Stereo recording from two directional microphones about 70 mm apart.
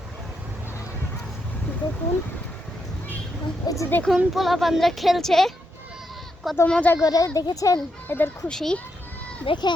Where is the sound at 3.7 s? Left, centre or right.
Left.